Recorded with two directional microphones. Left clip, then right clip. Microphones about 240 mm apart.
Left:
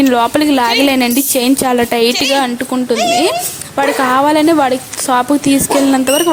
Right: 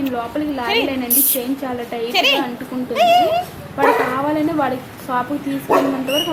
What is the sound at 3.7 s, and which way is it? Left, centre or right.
Speech, left.